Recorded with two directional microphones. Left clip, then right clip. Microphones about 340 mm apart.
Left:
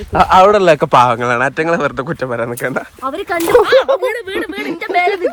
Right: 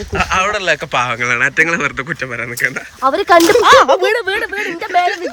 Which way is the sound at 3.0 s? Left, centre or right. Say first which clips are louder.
Right 9 dB; centre.